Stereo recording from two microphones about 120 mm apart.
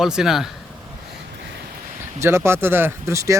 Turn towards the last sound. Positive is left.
turn(degrees=-25)  # may be behind; listen again after turning